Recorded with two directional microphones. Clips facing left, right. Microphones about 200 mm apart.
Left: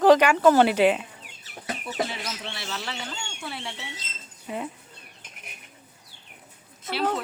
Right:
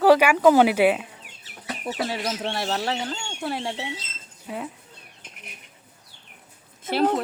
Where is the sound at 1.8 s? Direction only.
40° right (ahead or behind).